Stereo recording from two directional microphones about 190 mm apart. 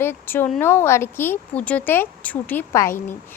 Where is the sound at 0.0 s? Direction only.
10° left (ahead or behind).